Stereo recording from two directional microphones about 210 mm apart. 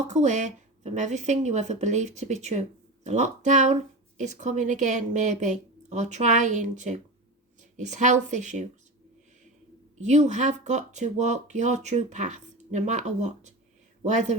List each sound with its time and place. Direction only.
0.1 s speech: 35° right (ahead or behind)
10.0 s speech: 35° right (ahead or behind)